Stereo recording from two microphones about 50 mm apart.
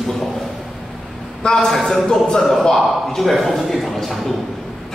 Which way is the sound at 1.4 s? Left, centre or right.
Centre.